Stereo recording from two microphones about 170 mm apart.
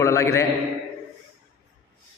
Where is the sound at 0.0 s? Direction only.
15° left (ahead or behind).